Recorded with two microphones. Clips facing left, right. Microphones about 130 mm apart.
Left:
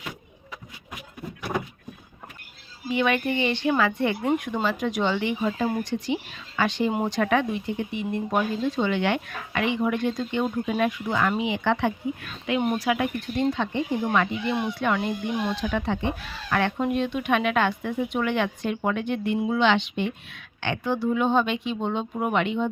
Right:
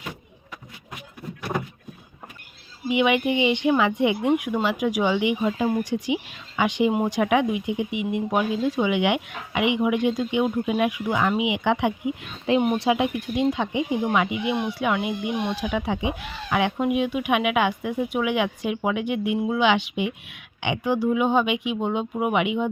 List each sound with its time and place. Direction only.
2.9 s a woman's voice: 15° right (ahead or behind)
12.8 s speech: 25° right (ahead or behind)
13.1 s a woman's voice: 10° right (ahead or behind)